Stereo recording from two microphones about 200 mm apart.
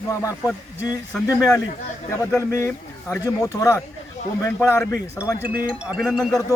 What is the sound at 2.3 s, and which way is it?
A man's voice, 15° left (ahead or behind).